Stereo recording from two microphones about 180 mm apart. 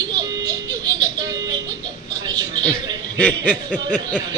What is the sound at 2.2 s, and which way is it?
Speech, 20° right (ahead or behind).